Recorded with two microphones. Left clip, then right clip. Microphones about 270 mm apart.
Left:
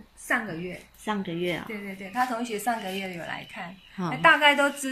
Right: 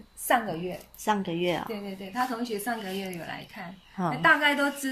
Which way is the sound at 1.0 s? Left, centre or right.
Centre.